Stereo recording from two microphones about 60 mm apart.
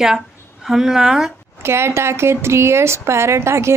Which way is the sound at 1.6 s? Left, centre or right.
Right.